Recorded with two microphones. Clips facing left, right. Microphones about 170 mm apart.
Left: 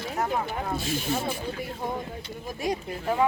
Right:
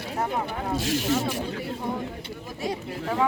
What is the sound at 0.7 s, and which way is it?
Speech, 90° right.